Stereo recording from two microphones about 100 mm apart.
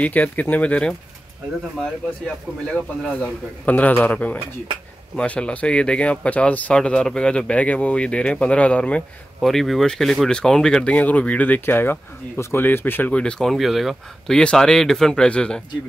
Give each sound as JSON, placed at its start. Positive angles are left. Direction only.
{"t": 0.0, "sound": "speech", "side_deg": 15}
{"t": 2.2, "sound": "speech", "side_deg": 10}